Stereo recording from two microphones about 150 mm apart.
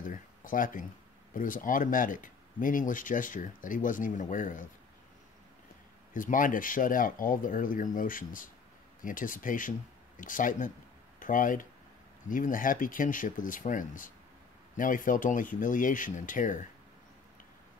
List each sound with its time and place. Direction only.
0.0 s a sound: 60° left (ahead or behind)
1.3 s speech: 65° left (ahead or behind)
6.1 s speech: 65° left (ahead or behind)